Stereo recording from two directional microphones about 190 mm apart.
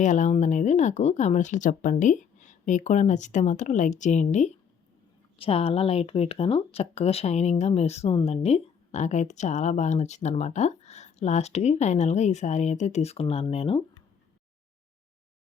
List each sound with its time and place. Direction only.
0.0 s speech: 40° left (ahead or behind)